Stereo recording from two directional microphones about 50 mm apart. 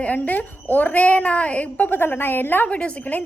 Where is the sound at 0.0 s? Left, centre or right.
Left.